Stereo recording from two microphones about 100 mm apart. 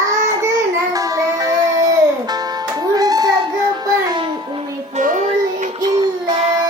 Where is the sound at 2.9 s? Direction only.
40° right (ahead or behind).